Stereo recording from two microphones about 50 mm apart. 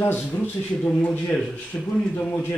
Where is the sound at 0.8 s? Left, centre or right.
Left.